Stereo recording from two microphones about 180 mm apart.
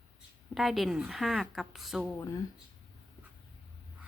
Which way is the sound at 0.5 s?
Centre (ahead or behind).